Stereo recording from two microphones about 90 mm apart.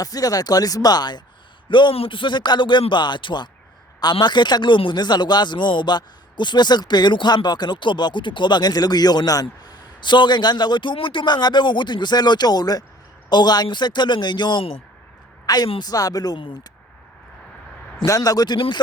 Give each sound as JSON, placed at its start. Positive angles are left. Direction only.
{"t": 0.0, "sound": "speech", "side_deg": 45}
{"t": 1.7, "sound": "a woman's voice", "side_deg": 75}
{"t": 18.0, "sound": "speech", "side_deg": 40}